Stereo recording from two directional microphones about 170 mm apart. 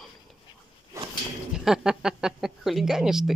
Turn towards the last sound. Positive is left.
turn(degrees=0)  # may be behind; listen again after turning